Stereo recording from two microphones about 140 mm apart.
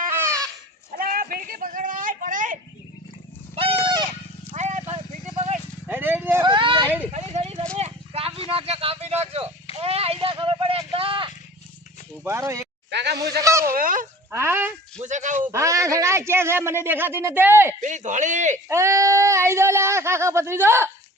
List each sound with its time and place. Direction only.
0.9 s a sound: 90° right; by 2.6 s 70° right (ahead or behind)
3.5 s a sound: 45° right (ahead or behind)
4.5 s vehicle: 60° right (ahead or behind)
5.9 s a sound: 15° right (ahead or behind)
6.4 s vehicle: 35° right (ahead or behind)
7.1 s a sound: 50° right (ahead or behind)
9.8 s vehicle: 45° right (ahead or behind)
12.2 s speech: 20° right (ahead or behind)
13.7 s speech: 90° right
14.3 s a man's voice: 15° right (ahead or behind)
14.9 s speech: 60° right (ahead or behind)
15.4 s a man's voice: 20° right (ahead or behind)
17.7 s a man's voice: 60° right (ahead or behind)
18.7 s speech: 20° right (ahead or behind)